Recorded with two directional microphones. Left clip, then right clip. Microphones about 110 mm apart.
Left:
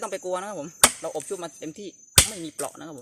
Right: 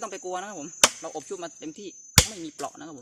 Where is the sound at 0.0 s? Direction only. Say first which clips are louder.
Left 4 dB; 20° right (ahead or behind).